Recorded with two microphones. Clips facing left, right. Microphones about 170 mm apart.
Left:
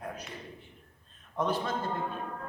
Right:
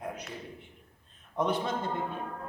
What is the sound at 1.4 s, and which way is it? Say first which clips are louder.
Speech: right 1 dB; 20° right (ahead or behind).